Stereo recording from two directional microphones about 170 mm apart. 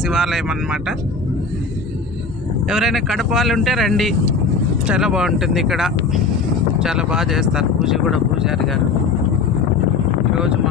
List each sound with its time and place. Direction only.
0.0 s speech: centre (ahead or behind)
2.7 s speech: centre (ahead or behind)